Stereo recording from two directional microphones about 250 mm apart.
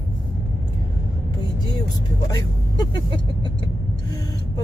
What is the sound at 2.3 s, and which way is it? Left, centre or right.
Speech, centre.